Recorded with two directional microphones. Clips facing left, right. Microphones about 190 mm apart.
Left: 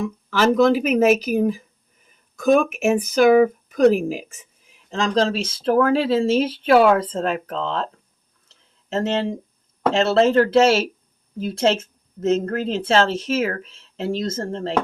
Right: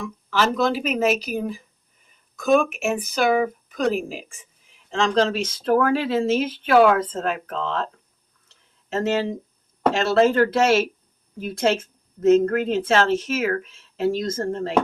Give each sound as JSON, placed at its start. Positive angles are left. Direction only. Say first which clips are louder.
{"t": 0.0, "sound": "speech", "louder": "left 4 dB", "side_deg": 50}
{"t": 4.9, "sound": "speech", "louder": "even", "side_deg": 30}
{"t": 9.0, "sound": "a woman's voice", "louder": "even", "side_deg": 25}